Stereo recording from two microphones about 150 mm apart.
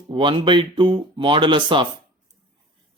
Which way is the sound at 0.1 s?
35° right (ahead or behind).